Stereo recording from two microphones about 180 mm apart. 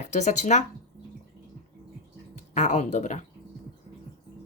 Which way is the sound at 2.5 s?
40° left (ahead or behind).